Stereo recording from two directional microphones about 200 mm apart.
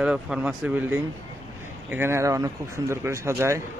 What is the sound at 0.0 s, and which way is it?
Speech, 5° right (ahead or behind).